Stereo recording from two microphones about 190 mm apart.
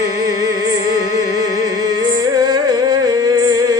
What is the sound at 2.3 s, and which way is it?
Music, 20° right (ahead or behind).